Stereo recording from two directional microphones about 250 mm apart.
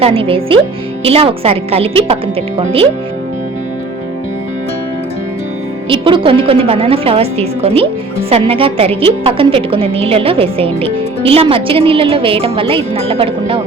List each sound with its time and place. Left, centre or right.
0.0 s a woman's voice: right
5.9 s a woman's voice: right